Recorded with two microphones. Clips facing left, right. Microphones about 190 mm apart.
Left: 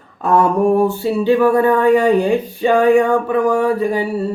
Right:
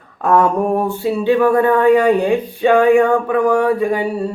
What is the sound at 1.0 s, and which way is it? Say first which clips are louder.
Speech: left 1 dB; centre (ahead or behind).